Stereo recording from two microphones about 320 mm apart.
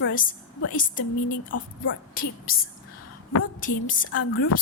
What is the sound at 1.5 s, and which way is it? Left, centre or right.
Speech, left.